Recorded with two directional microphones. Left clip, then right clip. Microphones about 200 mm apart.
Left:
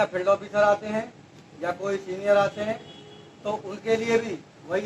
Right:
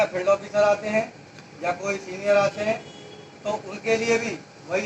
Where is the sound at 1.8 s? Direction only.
15° left (ahead or behind).